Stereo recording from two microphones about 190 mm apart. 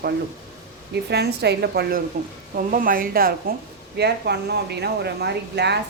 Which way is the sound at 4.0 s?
60° right (ahead or behind).